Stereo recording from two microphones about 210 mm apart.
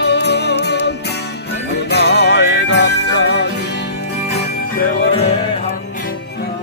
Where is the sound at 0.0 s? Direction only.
55° left (ahead or behind).